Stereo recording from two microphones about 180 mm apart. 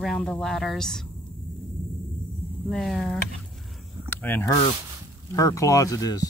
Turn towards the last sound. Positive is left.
turn(degrees=20)  # may be behind; listen again after turning